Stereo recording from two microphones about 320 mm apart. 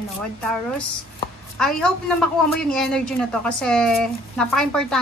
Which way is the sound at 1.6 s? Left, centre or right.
Centre.